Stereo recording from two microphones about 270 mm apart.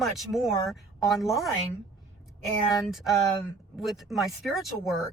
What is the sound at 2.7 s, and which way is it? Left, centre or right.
Speech, centre.